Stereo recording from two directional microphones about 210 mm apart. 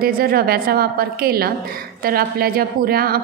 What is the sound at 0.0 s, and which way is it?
A woman's voice, 45° right (ahead or behind).